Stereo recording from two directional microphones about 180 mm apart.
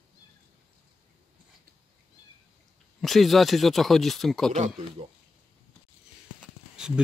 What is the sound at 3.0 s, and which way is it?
Speech, centre (ahead or behind).